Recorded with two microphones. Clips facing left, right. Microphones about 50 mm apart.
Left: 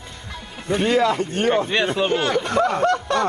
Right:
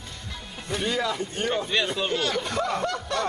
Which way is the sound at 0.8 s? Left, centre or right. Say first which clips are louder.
Left 9 dB; left.